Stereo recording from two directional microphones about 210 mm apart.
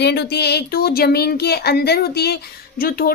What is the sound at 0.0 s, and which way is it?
Speech, 50° left (ahead or behind).